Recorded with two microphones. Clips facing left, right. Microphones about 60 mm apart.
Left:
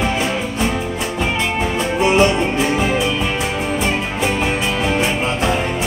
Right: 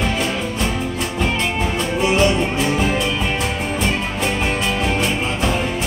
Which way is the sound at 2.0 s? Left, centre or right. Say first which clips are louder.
Left 3 dB; left.